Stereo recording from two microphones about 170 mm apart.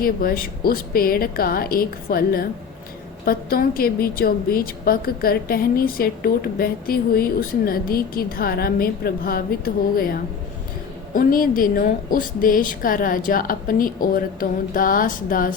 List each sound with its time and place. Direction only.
0.0 s a woman's voice: 60° left (ahead or behind)